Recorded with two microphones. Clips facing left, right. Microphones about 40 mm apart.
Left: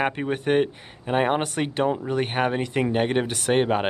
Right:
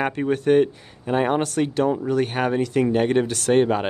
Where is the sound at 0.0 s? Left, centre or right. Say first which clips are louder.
Right 3 dB; centre.